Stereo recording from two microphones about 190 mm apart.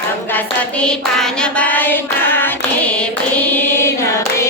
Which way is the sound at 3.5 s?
15° left (ahead or behind).